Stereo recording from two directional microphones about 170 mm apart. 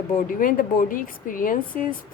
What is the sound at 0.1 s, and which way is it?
A woman's voice, 55° left (ahead or behind).